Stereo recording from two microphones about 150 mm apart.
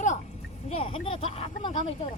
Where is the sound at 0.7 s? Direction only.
40° left (ahead or behind).